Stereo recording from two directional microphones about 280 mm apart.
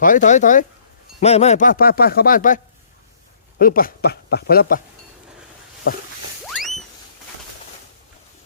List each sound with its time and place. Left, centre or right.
0.0 s speech: left
3.6 s speech: left
6.4 s a sound: centre